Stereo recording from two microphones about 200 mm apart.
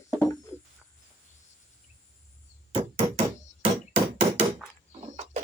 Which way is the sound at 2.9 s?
30° right (ahead or behind).